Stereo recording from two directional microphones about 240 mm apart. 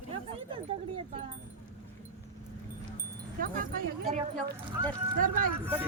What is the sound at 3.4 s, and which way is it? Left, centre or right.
Speech, right.